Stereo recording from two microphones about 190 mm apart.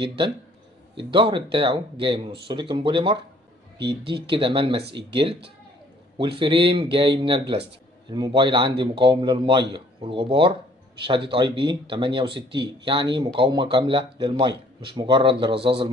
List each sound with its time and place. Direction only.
0.9 s a man's voice: 25° right (ahead or behind)
3.7 s speech: 60° right (ahead or behind)
4.1 s a man's voice: 25° right (ahead or behind)
4.8 s speech: 65° right (ahead or behind)
6.1 s a man's voice: 25° right (ahead or behind)